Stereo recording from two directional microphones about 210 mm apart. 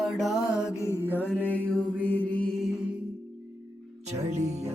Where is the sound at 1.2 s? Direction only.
10° left (ahead or behind).